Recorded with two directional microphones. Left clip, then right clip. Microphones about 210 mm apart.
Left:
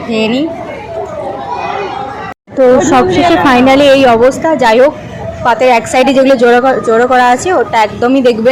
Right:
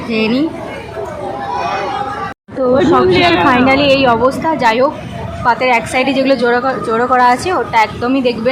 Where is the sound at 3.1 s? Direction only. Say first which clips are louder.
Left 3 dB; 15° right (ahead or behind).